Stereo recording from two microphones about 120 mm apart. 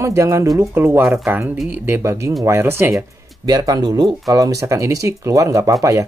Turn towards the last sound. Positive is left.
turn(degrees=-25)  # may be behind; listen again after turning